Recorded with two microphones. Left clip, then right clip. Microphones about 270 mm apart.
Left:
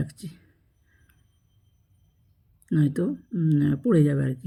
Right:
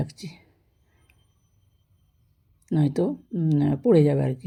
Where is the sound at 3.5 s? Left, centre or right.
Right.